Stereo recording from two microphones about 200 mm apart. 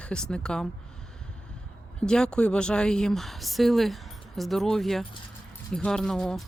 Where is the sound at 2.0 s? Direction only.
5° left (ahead or behind).